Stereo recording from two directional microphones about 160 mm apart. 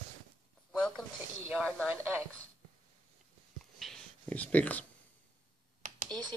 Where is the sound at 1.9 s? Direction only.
15° right (ahead or behind).